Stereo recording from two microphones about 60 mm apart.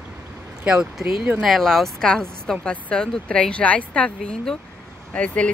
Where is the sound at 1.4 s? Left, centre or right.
Centre.